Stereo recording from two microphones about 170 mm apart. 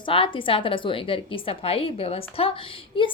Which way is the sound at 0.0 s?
30° left (ahead or behind).